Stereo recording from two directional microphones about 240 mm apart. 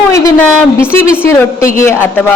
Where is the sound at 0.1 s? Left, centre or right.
Centre.